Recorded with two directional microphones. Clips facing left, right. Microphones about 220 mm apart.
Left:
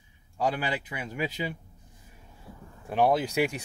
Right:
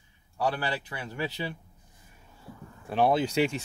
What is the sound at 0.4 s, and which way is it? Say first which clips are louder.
Speech: left 1 dB; 15° left (ahead or behind).